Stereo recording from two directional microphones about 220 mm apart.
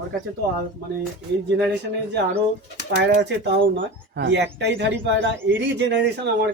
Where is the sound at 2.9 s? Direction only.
50° right (ahead or behind).